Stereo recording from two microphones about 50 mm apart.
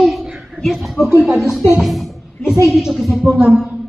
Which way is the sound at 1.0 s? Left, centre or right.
Left.